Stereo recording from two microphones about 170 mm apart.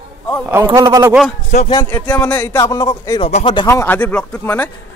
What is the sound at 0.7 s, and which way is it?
Speech, 20° right (ahead or behind).